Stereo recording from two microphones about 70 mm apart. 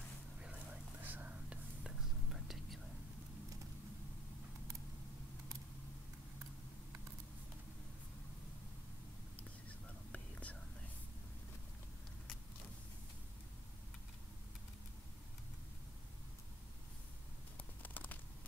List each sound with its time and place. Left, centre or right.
1.0 s whispering: right
1.8 s whispering: centre
10.1 s whispering: left
17.6 s a sound: left